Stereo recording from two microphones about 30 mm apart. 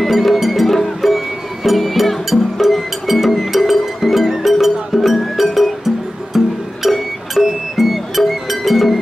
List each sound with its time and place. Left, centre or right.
0.0 s music: centre
0.7 s music: centre